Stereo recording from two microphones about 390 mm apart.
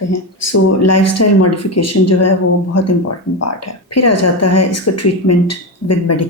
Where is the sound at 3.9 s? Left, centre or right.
Left.